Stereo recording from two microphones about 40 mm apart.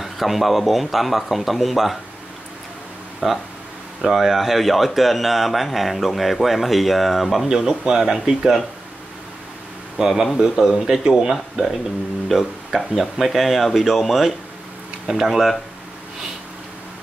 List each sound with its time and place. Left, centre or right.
0.0 s speech: centre
3.2 s speech: centre
7.4 s speech: centre
9.9 s speech: centre